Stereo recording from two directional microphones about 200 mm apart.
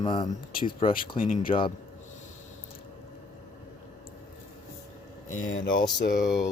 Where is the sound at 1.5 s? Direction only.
25° left (ahead or behind).